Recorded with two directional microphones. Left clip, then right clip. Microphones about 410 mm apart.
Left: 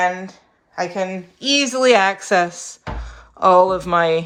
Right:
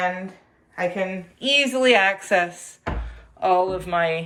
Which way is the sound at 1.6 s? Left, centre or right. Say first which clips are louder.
Left 5 dB; left.